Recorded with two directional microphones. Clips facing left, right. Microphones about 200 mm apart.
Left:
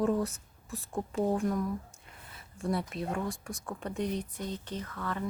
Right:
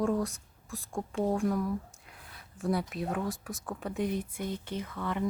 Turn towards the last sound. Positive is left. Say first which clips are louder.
# right 2 dB
turn(degrees=-15)  # may be behind; listen again after turning